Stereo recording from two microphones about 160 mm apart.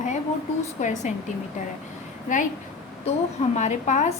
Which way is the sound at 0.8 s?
50° left (ahead or behind).